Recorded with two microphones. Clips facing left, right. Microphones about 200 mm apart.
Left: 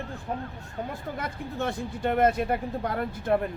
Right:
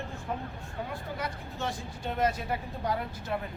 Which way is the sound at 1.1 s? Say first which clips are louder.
Left 4 dB; 55° left (ahead or behind).